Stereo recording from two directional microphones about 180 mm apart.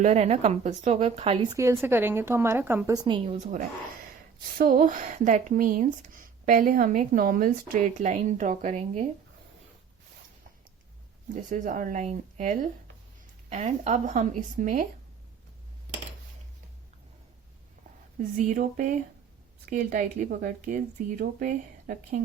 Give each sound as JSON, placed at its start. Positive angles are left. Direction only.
{"t": 0.0, "sound": "speech", "side_deg": -35}
{"t": 1.5, "sound": "a woman's voice", "side_deg": -15}
{"t": 4.4, "sound": "speech", "side_deg": -50}
{"t": 11.4, "sound": "speech", "side_deg": -45}
{"t": 18.2, "sound": "speech", "side_deg": -45}